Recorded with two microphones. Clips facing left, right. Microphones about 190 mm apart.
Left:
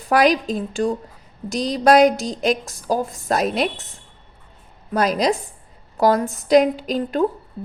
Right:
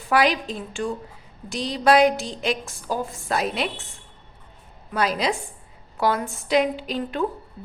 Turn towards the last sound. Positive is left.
turn(degrees=40)  # may be behind; listen again after turning